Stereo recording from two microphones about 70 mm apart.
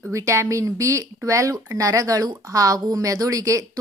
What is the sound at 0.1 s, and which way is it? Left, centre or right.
A woman's voice, right.